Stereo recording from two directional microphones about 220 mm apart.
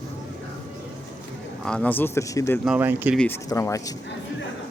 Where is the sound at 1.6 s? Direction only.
5° left (ahead or behind).